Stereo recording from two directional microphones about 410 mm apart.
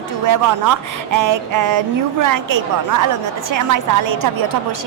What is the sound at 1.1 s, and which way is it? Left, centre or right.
A woman's voice, right.